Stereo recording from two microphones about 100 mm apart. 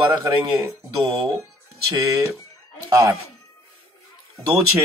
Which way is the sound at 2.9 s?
30° right (ahead or behind).